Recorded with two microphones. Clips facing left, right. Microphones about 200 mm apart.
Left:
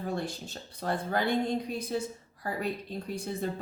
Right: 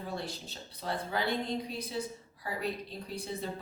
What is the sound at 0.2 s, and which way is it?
Speech, 50° left (ahead or behind).